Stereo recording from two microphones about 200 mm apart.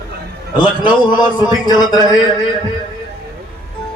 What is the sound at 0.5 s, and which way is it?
A man's voice, 25° left (ahead or behind).